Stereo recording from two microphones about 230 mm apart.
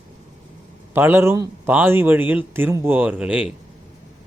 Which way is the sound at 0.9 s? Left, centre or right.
Centre.